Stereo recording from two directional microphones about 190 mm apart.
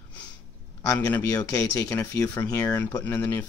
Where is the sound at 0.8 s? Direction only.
15° left (ahead or behind).